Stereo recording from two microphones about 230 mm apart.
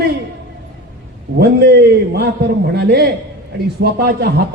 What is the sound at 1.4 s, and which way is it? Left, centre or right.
A man's voice, right.